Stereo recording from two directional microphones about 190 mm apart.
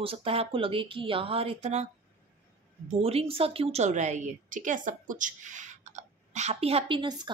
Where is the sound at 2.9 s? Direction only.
30° right (ahead or behind).